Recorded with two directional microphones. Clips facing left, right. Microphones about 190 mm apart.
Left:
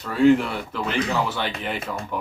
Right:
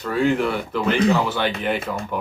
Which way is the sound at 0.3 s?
Centre (ahead or behind).